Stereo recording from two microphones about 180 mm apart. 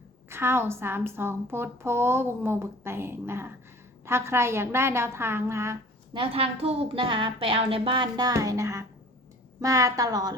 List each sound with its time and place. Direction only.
0.3 s a woman's voice: 15° right (ahead or behind)
6.1 s a woman's voice: 30° right (ahead or behind)